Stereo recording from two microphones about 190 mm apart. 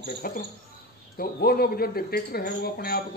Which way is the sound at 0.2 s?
50° left (ahead or behind).